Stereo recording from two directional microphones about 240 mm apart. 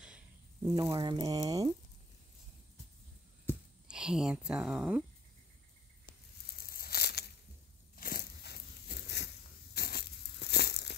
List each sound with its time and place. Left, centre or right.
0.0 s a sound: centre
0.7 s speech: centre
3.8 s speech: centre
6.6 s crumpling: left
7.9 s biting: left
9.8 s tearing: left